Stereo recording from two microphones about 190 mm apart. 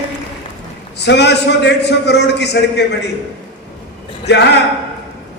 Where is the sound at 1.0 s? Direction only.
65° left (ahead or behind).